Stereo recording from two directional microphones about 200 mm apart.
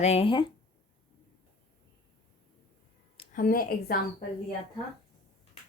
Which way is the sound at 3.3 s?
45° left (ahead or behind).